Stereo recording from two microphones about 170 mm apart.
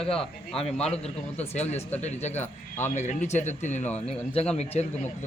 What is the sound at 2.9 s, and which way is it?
A man's voice, 45° left (ahead or behind).